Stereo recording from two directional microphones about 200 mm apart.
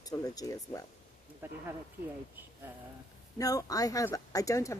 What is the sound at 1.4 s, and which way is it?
Speech, 10° right (ahead or behind).